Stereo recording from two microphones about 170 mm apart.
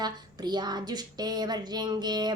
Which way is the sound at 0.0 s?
25° right (ahead or behind).